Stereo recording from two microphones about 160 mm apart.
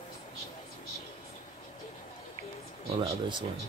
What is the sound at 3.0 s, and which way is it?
Speech, 30° right (ahead or behind).